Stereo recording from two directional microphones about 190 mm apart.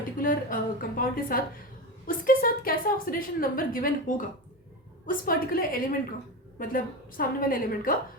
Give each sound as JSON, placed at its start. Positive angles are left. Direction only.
{"t": 0.2, "sound": "a woman's voice", "side_deg": 45}